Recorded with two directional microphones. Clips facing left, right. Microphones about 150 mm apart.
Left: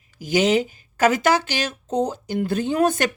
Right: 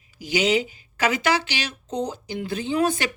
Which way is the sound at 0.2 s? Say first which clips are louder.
Left 3 dB; 50° left (ahead or behind).